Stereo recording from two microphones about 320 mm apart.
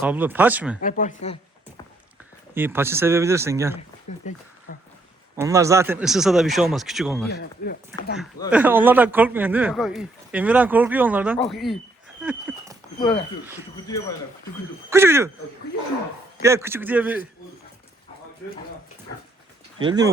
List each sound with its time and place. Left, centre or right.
0.0 s speech: centre
0.8 s speech: left
2.6 s speech: centre
4.2 s speech: left
4.7 s a sound: left
5.4 s speech: centre
7.3 s speech: left
8.4 s speech: centre
12.2 s a sound: centre
13.0 s speech: centre
14.8 s speech: centre
16.4 s speech: centre
19.8 s speech: centre